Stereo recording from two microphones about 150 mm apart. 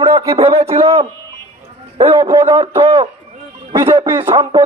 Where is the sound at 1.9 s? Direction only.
35° right (ahead or behind).